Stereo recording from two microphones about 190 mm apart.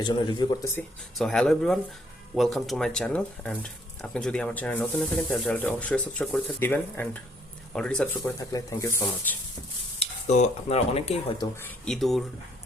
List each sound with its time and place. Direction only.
0.0 s speech: 25° left (ahead or behind)
1.2 s speech: 5° left (ahead or behind)
8.4 s speech: 15° left (ahead or behind)
10.0 s speech: 35° left (ahead or behind)
11.9 s speech: centre (ahead or behind)